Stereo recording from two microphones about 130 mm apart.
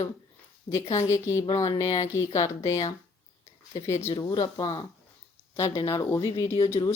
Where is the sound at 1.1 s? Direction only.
20° left (ahead or behind).